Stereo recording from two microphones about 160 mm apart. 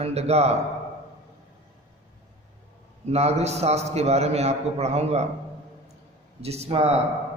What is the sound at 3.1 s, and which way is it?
A man's voice, 40° right (ahead or behind).